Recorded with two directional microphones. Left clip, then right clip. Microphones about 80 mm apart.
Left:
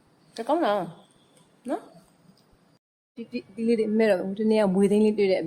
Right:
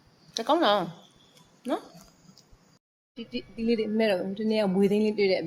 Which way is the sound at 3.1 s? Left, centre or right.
Left.